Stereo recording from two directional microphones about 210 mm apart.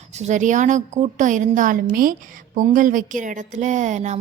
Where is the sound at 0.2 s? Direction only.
35° right (ahead or behind).